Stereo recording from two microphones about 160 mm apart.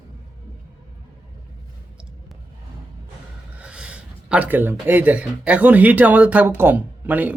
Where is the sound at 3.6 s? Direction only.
5° right (ahead or behind).